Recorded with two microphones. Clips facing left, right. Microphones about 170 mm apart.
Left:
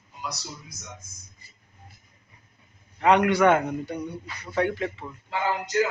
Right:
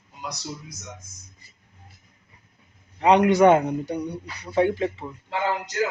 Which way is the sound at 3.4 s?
20° right (ahead or behind).